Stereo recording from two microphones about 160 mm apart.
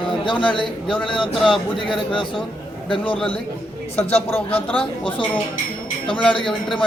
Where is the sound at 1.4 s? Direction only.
5° left (ahead or behind).